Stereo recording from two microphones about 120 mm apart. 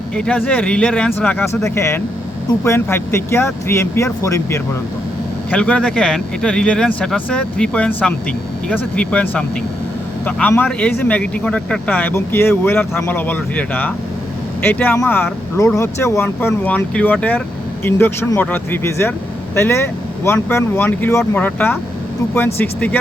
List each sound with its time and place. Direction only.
0.2 s speech: 10° left (ahead or behind)
1.6 s speech: 25° left (ahead or behind)
5.5 s speech: 10° left (ahead or behind)